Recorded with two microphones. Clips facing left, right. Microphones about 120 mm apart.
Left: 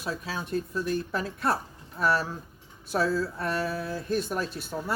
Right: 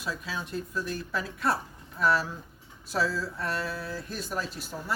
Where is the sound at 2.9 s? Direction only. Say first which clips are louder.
Left 3 dB; 55° left (ahead or behind).